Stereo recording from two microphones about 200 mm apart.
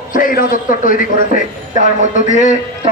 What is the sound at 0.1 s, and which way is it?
A man's voice, 45° left (ahead or behind).